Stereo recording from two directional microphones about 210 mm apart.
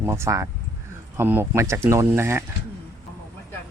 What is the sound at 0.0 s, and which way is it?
Speech, 15° right (ahead or behind).